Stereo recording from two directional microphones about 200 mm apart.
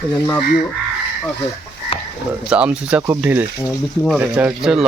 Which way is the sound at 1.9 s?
30° left (ahead or behind).